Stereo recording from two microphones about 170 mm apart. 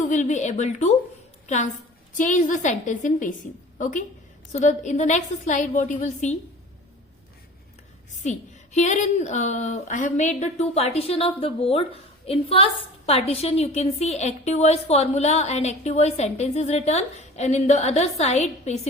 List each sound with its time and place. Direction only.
0.1 s a woman's voice: 45° left (ahead or behind)
8.2 s a woman's voice: 45° left (ahead or behind)